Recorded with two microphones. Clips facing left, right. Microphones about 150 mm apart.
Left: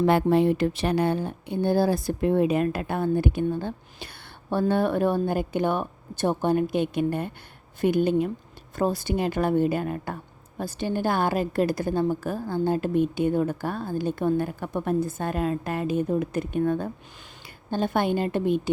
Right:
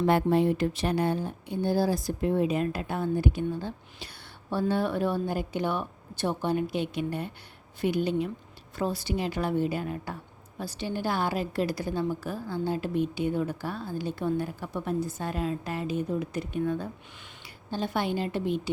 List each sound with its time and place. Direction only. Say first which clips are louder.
0.0 s a woman's voice: left 3 dB; 85° left; by 18.7 s 50° left (ahead or behind)